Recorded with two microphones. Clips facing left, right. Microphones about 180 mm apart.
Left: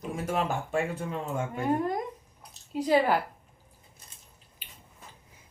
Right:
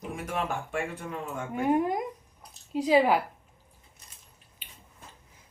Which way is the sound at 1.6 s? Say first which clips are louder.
Right 3 dB; 10° right (ahead or behind).